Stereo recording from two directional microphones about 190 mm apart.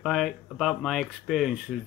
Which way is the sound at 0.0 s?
Centre (ahead or behind).